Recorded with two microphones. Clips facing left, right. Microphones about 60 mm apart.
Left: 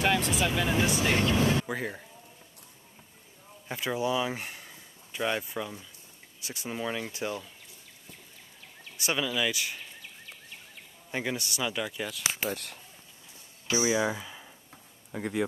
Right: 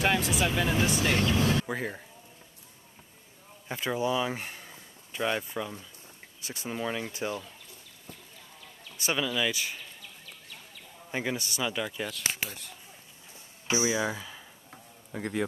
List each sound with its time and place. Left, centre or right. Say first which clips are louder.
0.0 s speech: even; centre
1.1 s speech: left 1 dB; centre
1.7 s speech: even; centre
3.6 s speech: even; centre
9.0 s speech: even; centre
11.1 s speech: even; centre
12.4 s speech: left 10 dB; left
13.9 s speech: left 2 dB; centre